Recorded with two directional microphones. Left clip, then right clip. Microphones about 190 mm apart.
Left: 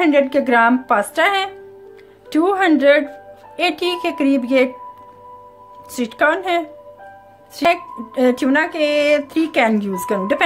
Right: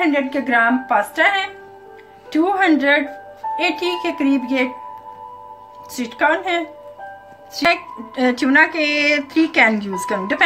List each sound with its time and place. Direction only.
0.0 s a woman's voice: 45° left (ahead or behind)
5.9 s speech: 40° left (ahead or behind)